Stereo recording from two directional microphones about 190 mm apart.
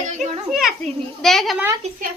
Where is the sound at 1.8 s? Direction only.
35° right (ahead or behind).